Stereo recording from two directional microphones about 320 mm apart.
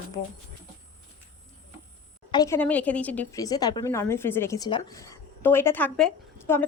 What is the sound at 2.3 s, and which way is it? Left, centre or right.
A woman's voice, centre.